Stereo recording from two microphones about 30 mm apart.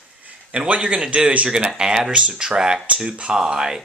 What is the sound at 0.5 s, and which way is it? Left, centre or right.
Speech, right.